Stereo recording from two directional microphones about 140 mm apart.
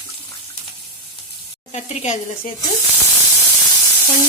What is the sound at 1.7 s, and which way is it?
Speech, 55° left (ahead or behind).